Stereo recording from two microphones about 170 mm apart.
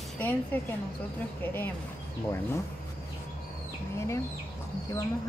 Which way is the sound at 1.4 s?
10° left (ahead or behind).